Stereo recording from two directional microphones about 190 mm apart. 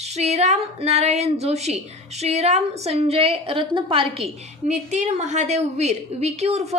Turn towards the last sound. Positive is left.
turn(degrees=-35)  # may be behind; listen again after turning